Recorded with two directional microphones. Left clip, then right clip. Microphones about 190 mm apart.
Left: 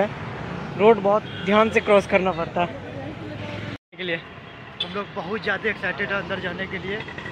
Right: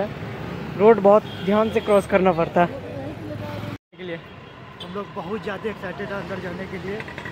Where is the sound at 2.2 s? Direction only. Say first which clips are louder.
Right 5 dB; 30° right (ahead or behind).